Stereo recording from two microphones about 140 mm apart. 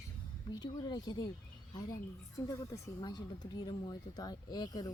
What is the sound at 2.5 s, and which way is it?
Speech, 25° left (ahead or behind).